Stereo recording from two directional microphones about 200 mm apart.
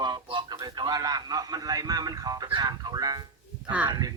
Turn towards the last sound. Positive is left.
turn(degrees=-20)  # may be behind; listen again after turning